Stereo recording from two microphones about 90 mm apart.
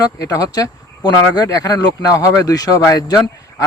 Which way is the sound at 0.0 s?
45° left (ahead or behind).